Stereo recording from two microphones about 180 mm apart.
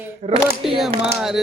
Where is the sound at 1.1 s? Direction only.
Centre (ahead or behind).